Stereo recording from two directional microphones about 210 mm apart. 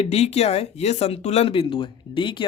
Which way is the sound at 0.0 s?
30° left (ahead or behind).